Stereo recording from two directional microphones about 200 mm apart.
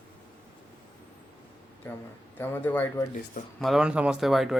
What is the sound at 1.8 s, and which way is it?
Speech, 10° left (ahead or behind).